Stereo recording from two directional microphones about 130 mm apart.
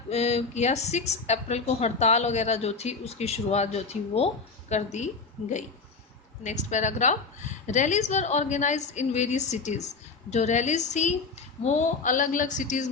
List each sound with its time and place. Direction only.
0.1 s a woman's voice: 55° left (ahead or behind)
6.4 s a woman's voice: 65° left (ahead or behind)